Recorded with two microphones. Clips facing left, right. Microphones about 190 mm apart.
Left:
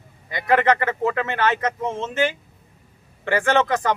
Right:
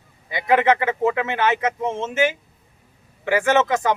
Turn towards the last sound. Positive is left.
turn(degrees=-5)  # may be behind; listen again after turning